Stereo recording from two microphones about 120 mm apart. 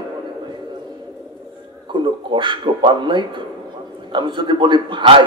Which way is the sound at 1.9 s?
40° right (ahead or behind).